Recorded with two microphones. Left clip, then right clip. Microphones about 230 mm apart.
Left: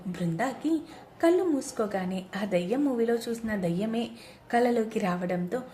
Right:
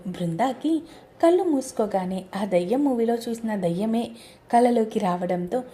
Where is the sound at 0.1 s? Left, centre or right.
Centre.